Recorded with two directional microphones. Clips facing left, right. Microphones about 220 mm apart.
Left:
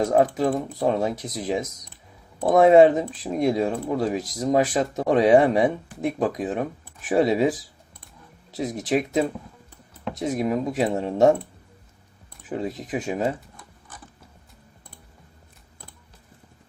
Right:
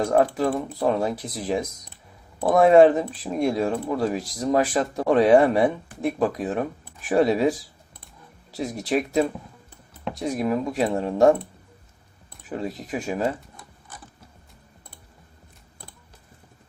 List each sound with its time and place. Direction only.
0.0 s speech: 20° left (ahead or behind)
8.5 s speech: 20° left (ahead or behind)
12.5 s speech: 20° left (ahead or behind)